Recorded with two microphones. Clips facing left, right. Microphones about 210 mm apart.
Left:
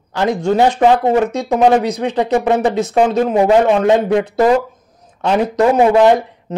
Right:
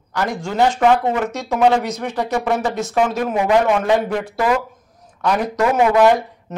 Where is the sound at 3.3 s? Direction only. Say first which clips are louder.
Left 4 dB; 35° left (ahead or behind).